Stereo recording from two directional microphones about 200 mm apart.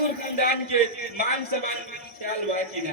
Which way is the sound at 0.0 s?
50° left (ahead or behind).